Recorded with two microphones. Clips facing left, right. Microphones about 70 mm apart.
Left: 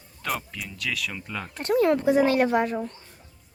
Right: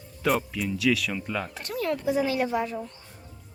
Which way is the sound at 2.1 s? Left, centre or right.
Left.